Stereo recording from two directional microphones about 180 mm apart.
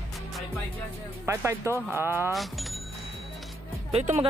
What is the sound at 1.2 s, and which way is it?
Speech, 15° right (ahead or behind).